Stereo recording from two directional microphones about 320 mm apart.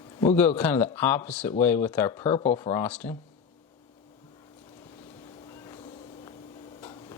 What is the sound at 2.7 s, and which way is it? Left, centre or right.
Speech, centre.